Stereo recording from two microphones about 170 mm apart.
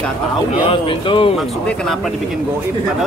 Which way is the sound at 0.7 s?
30° left (ahead or behind).